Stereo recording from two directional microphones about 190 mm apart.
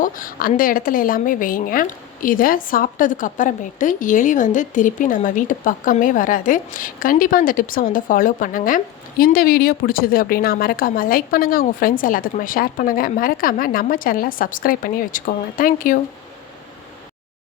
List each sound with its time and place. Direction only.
0.0 s a woman's voice: 45° left (ahead or behind)